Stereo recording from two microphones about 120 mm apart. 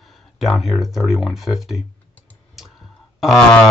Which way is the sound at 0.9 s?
Centre (ahead or behind).